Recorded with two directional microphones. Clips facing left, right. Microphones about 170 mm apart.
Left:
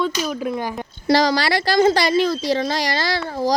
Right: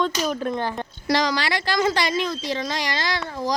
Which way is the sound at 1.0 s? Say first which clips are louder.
Left 5 dB; 35° left (ahead or behind).